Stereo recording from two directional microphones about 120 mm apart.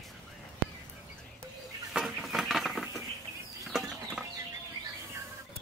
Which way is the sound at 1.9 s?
Centre (ahead or behind).